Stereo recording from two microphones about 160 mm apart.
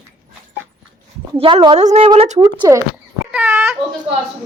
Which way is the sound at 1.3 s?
30° right (ahead or behind).